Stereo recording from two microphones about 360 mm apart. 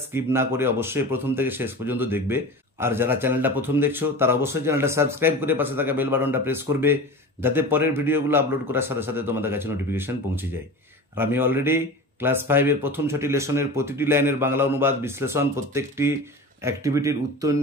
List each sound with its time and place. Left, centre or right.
0.1 s speech: centre